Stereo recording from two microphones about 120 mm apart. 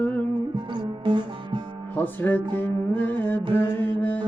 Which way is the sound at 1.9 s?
15° left (ahead or behind).